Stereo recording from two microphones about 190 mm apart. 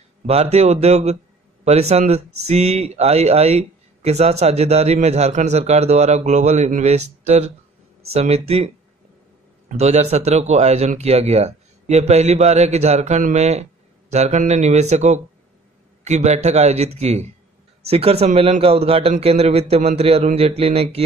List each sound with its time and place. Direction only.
0.3 s speech: 35° right (ahead or behind)